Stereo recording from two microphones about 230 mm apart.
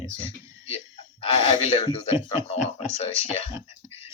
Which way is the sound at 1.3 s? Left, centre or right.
Left.